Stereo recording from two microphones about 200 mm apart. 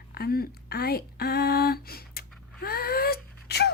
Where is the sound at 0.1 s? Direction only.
50° left (ahead or behind).